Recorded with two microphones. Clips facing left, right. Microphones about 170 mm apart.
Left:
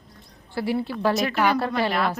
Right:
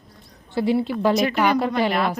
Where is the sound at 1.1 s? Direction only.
Centre (ahead or behind).